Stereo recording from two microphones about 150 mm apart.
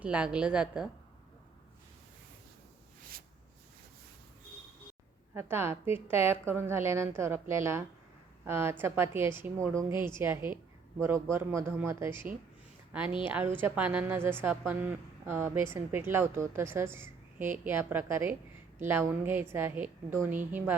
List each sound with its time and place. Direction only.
0.0 s speech: 5° right (ahead or behind)
5.3 s speech: 15° right (ahead or behind)